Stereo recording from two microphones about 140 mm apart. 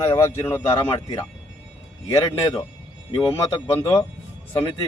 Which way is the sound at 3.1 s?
35° left (ahead or behind).